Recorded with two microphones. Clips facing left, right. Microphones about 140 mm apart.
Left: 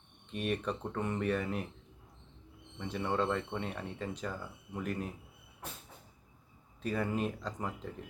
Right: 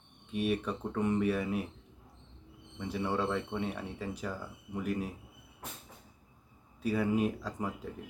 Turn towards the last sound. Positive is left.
turn(degrees=-10)  # may be behind; listen again after turning